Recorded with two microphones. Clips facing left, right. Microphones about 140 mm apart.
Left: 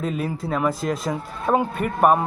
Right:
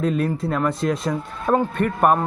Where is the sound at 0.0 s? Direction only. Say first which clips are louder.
Right 4 dB; 5° left (ahead or behind).